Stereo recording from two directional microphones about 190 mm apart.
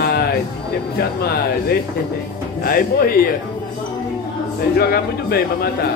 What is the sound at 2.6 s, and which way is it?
Speech, 50° left (ahead or behind).